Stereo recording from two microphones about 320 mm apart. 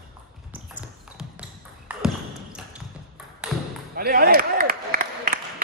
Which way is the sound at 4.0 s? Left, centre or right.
Right.